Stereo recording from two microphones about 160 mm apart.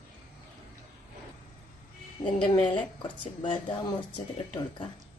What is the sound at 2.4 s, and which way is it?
A woman's voice, 30° left (ahead or behind).